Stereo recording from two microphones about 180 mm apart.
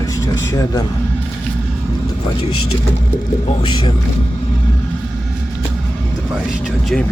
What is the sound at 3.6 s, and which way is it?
Speech, 25° left (ahead or behind).